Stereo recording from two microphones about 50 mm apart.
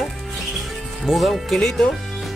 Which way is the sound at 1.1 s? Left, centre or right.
Centre.